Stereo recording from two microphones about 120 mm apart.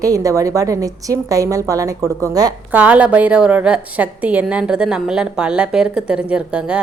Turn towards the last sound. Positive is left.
turn(degrees=-10)  # may be behind; listen again after turning